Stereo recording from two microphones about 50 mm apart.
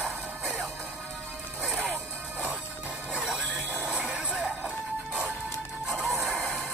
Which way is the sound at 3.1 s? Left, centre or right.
Centre.